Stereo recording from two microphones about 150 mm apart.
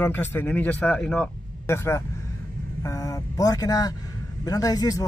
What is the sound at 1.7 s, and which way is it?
Speech, 20° left (ahead or behind).